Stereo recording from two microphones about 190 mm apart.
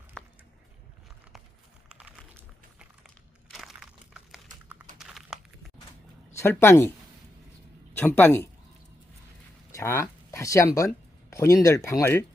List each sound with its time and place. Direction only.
2.0 s a sound: 5° right (ahead or behind)
6.3 s speech: 10° left (ahead or behind)
7.9 s speech: 10° left (ahead or behind)
9.7 s speech: 15° left (ahead or behind)